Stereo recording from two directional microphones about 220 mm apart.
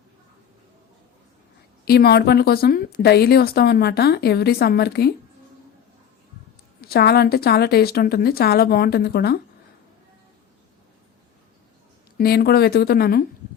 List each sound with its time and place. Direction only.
1.8 s speech: 45° left (ahead or behind)
6.8 s speech: 45° left (ahead or behind)
12.1 s speech: 45° left (ahead or behind)